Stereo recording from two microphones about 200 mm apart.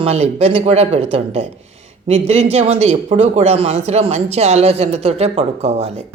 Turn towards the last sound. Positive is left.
turn(degrees=-30)  # may be behind; listen again after turning